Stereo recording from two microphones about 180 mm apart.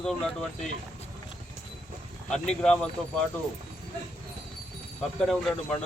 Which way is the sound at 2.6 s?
5° left (ahead or behind).